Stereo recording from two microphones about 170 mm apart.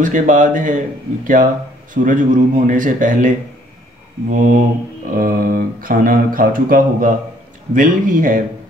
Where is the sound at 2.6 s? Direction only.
50° right (ahead or behind).